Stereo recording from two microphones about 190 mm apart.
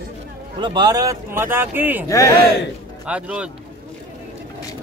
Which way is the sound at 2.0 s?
15° left (ahead or behind).